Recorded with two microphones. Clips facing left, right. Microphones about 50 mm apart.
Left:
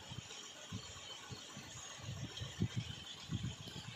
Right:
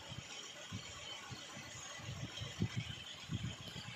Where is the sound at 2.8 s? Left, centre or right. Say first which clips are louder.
Right 1 dB; right.